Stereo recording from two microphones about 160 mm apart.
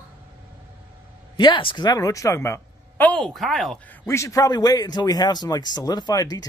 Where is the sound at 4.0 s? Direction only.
15° left (ahead or behind).